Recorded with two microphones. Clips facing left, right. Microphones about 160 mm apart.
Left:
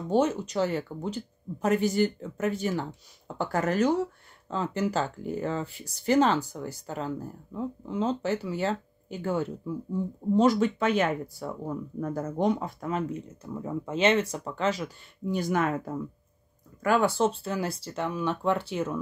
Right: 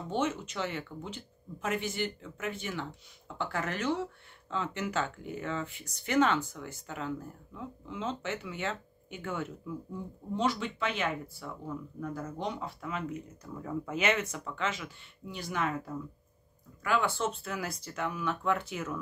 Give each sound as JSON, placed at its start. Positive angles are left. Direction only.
{"t": 0.1, "sound": "speech", "side_deg": 40}
{"t": 13.1, "sound": "speech", "side_deg": 25}
{"t": 16.8, "sound": "speech", "side_deg": 40}